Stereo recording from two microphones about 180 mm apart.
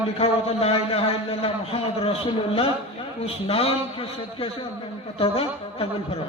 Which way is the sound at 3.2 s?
35° left (ahead or behind).